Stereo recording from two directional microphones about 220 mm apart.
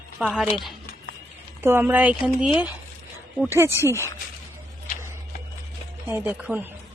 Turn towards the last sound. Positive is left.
turn(degrees=-10)  # may be behind; listen again after turning